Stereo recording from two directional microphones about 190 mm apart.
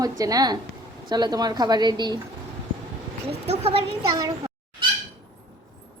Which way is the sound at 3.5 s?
35° right (ahead or behind).